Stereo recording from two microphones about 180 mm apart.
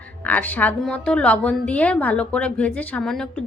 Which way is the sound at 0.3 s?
10° left (ahead or behind).